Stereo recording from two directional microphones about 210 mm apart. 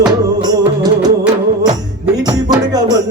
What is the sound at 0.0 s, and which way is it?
Music, 20° right (ahead or behind).